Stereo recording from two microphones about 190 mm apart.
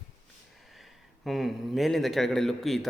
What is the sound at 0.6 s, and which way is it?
A man's voice, centre (ahead or behind).